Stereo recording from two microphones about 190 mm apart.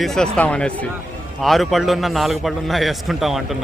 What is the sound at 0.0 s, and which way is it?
A man's voice, centre (ahead or behind).